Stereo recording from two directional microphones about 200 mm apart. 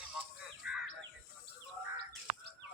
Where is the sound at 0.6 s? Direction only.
5° right (ahead or behind).